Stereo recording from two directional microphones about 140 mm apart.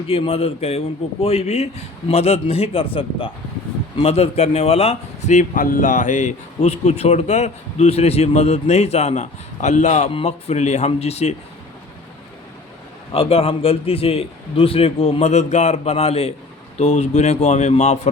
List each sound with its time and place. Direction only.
0.1 s a man's voice: 45° left (ahead or behind)
10.1 s a man's voice: 45° left (ahead or behind)
13.1 s a man's voice: 45° left (ahead or behind)